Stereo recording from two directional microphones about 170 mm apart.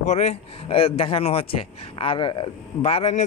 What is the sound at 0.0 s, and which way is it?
A man's voice, 40° left (ahead or behind).